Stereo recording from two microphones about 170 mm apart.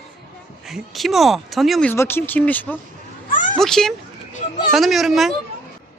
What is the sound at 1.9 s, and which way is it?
Speech, 15° left (ahead or behind).